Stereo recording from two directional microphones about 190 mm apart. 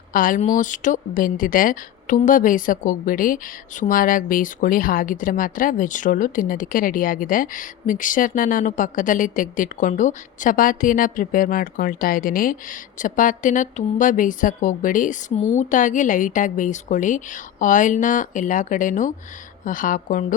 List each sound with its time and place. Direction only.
0.1 s a woman's voice: 45° left (ahead or behind)